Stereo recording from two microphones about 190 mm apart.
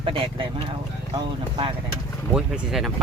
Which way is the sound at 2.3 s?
5° right (ahead or behind).